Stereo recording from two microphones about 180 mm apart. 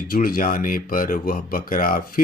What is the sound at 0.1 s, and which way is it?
Mantra, 55° left (ahead or behind).